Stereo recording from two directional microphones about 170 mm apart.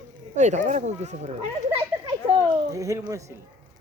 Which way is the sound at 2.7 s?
20° right (ahead or behind).